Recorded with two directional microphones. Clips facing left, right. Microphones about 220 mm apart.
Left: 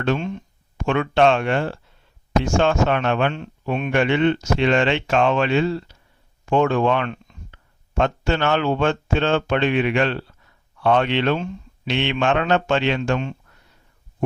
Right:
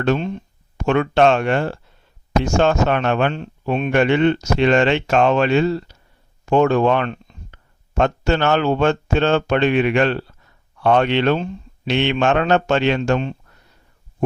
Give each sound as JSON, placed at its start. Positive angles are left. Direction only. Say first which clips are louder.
{"t": 0.0, "sound": "a man's voice", "louder": "right 3 dB", "side_deg": -40}